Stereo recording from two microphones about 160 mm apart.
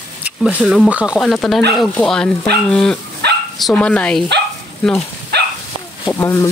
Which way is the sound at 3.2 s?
90° right.